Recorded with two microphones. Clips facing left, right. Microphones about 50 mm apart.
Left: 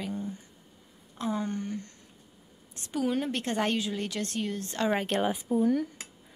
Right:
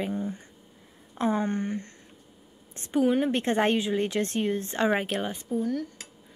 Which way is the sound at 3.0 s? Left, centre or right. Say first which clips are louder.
Right 5 dB; centre.